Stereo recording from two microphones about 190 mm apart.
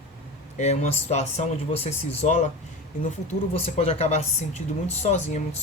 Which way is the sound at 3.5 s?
35° left (ahead or behind).